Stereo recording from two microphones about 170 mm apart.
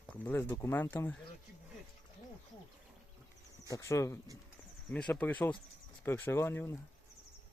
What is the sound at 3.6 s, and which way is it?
Speech, 20° left (ahead or behind).